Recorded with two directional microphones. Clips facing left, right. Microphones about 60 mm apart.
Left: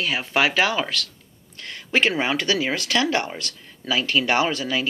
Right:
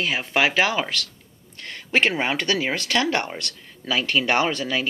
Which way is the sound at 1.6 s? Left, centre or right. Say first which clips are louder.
Even; right.